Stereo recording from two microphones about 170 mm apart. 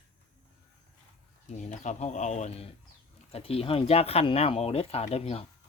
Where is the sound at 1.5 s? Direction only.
45° left (ahead or behind).